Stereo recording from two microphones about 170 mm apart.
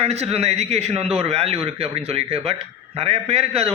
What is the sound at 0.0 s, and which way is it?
A man's voice, 40° right (ahead or behind).